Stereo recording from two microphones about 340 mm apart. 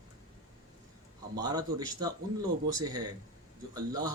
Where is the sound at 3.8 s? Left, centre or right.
Centre.